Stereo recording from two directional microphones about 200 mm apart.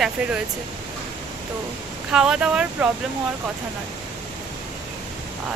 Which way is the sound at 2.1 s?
5° right (ahead or behind).